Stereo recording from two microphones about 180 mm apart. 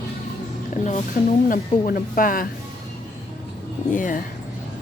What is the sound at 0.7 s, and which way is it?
Speech, 40° left (ahead or behind).